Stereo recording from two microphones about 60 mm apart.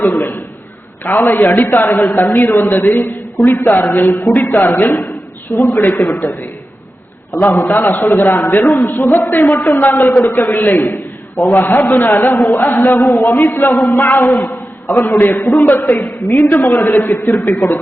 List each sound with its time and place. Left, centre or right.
0.0 s a man's voice: left